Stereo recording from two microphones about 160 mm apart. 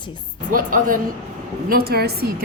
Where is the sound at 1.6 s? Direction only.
70° right (ahead or behind).